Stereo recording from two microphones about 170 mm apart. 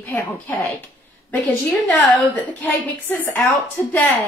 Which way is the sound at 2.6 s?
10° left (ahead or behind).